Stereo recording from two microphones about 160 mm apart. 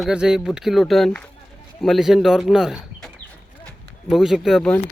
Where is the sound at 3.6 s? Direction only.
Centre (ahead or behind).